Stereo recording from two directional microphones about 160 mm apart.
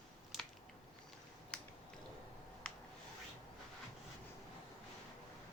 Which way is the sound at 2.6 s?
5° left (ahead or behind).